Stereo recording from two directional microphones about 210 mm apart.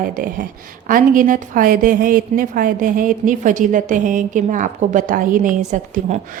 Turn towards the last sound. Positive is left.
turn(degrees=-35)  # may be behind; listen again after turning